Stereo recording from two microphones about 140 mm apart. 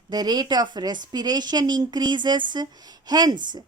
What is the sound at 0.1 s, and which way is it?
A woman's voice, 30° right (ahead or behind).